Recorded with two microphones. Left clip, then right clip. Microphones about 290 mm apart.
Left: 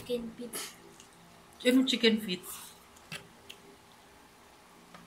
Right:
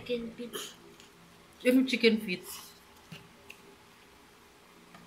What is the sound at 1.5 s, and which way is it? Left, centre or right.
Speech, centre.